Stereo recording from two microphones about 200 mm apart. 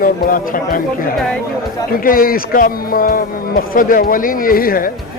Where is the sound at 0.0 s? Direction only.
45° left (ahead or behind).